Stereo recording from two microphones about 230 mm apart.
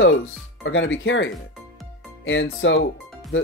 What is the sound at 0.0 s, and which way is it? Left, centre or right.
Speech, left.